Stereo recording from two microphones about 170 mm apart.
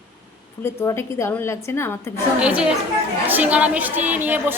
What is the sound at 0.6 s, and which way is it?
A woman's voice, 15° left (ahead or behind).